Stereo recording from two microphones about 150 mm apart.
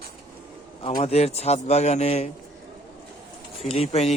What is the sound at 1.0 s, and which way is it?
A man's voice, 45° left (ahead or behind).